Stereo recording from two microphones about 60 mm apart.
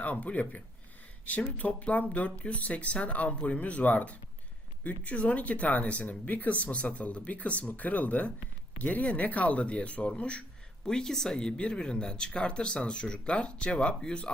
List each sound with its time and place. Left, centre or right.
0.0 s speech: left